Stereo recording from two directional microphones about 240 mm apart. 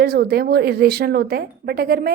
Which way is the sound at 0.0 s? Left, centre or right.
Right.